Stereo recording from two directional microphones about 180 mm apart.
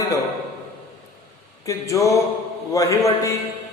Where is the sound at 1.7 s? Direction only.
15° left (ahead or behind).